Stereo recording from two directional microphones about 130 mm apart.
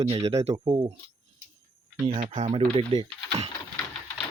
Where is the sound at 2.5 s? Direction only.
45° right (ahead or behind).